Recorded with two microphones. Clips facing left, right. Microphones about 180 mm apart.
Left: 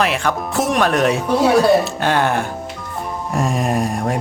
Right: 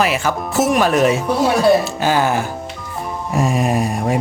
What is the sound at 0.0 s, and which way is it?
Speech, 5° right (ahead or behind).